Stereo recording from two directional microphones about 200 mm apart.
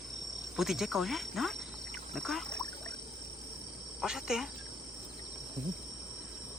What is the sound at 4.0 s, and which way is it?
Speech, centre (ahead or behind).